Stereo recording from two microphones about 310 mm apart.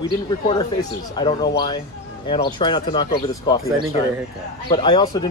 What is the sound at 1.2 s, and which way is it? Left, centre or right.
Speech, centre.